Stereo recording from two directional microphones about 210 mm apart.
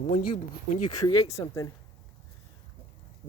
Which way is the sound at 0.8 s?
20° left (ahead or behind).